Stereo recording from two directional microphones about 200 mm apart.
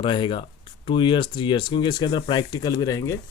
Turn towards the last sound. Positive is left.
turn(degrees=15)  # may be behind; listen again after turning